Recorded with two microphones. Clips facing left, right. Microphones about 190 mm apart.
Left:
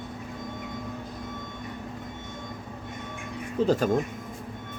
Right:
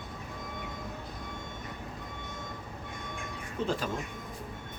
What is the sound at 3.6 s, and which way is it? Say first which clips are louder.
Speech: left 10 dB; 40° left (ahead or behind).